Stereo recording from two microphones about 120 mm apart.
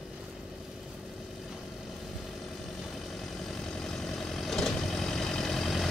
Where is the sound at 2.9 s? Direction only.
Centre (ahead or behind).